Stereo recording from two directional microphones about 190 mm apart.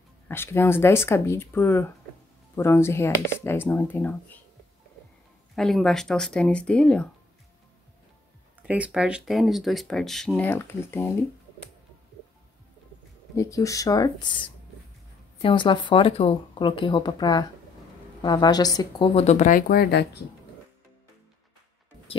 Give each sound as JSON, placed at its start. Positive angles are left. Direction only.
{"t": 0.3, "sound": "speech", "side_deg": 10}
{"t": 5.6, "sound": "speech", "side_deg": 0}
{"t": 8.6, "sound": "speech", "side_deg": -5}
{"t": 13.4, "sound": "speech", "side_deg": 15}
{"t": 19.1, "sound": "speech", "side_deg": 35}